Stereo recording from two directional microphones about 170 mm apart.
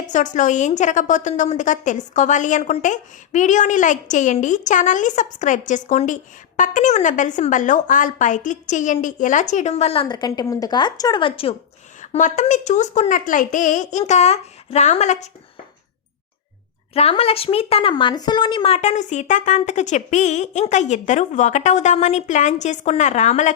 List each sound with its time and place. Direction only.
0.1 s a woman's voice: 45° left (ahead or behind)
12.0 s a woman's voice: 45° left (ahead or behind)
16.9 s a woman's voice: 35° left (ahead or behind)